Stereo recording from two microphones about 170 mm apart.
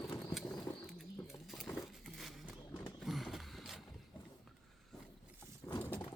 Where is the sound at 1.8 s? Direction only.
Centre (ahead or behind).